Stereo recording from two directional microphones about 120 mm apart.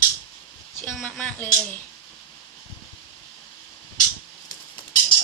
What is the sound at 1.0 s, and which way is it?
Speech, 10° left (ahead or behind).